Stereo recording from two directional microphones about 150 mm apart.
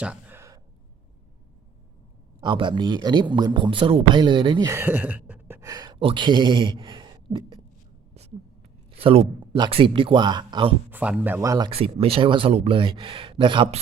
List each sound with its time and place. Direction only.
0.0 s sigh: 10° right (ahead or behind)
2.4 s speech: 30° right (ahead or behind)
4.7 s speech: 15° right (ahead or behind); by 7.6 s 35° right (ahead or behind)
9.0 s speech: 40° right (ahead or behind)
10.9 s speech: 10° right (ahead or behind)
11.3 s speech: 25° right (ahead or behind)
11.7 s speech: 40° right (ahead or behind)